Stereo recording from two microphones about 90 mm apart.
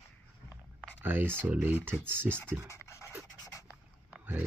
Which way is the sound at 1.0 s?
25° right (ahead or behind).